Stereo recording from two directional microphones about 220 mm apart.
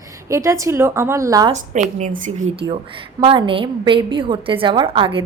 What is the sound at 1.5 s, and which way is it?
A woman's voice, 35° right (ahead or behind).